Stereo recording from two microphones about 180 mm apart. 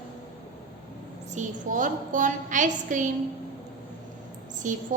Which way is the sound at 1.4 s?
45° right (ahead or behind).